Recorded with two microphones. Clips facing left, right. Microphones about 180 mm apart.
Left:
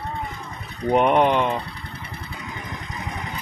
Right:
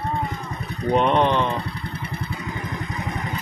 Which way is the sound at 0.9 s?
15° left (ahead or behind).